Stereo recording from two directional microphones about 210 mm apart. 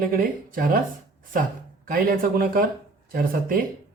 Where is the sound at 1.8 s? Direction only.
45° right (ahead or behind).